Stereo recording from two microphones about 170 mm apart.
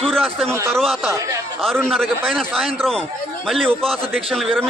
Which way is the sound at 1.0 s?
15° right (ahead or behind).